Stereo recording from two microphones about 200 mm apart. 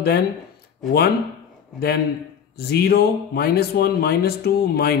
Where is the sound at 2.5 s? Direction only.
50° left (ahead or behind).